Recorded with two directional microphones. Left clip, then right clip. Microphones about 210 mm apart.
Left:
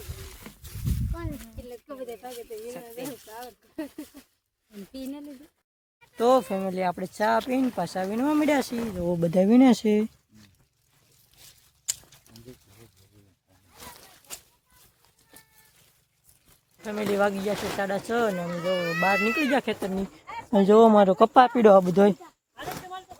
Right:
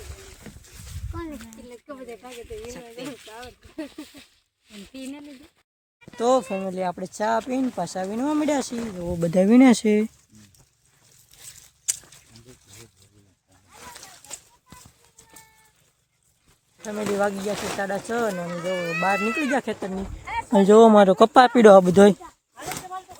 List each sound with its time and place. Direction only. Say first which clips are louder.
2.0 s speech: even; 10° right (ahead or behind)
3.4 s speech: right 1 dB; 5° left (ahead or behind)
6.0 s speech: even; 5° right (ahead or behind)
11.9 s a sound: right 4 dB; centre (ahead or behind)
16.8 s speech: right 1 dB; 10° right (ahead or behind)
20.2 s a sound: right 9 dB; 45° right (ahead or behind)
20.5 s speech: right 3 dB; 10° right (ahead or behind)